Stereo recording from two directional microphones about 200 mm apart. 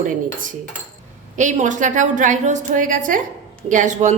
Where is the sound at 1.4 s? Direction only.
40° right (ahead or behind).